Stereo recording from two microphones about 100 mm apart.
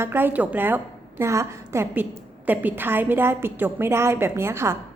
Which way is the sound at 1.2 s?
30° right (ahead or behind).